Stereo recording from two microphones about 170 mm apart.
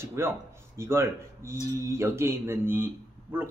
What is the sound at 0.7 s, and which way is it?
A man's voice, 15° right (ahead or behind).